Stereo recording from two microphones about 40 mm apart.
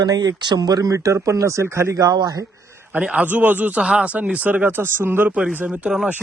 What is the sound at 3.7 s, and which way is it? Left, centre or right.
Speech, right.